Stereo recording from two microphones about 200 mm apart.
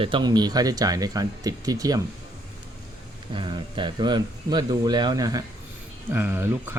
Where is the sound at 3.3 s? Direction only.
25° right (ahead or behind).